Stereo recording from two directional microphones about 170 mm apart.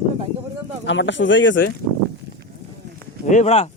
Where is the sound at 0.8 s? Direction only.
90° left.